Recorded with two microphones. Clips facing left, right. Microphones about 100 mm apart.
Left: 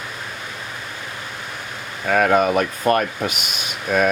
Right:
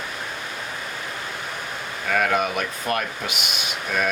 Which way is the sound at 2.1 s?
40° left (ahead or behind).